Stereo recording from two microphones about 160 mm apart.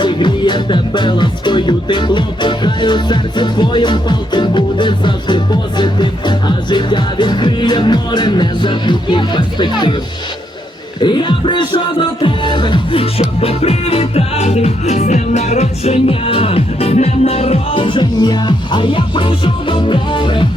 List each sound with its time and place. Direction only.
0.0 s music: 30° left (ahead or behind)
11.0 s speech: 30° left (ahead or behind)